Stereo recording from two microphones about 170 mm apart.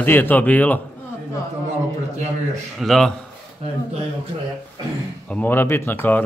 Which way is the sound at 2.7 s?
Centre (ahead or behind).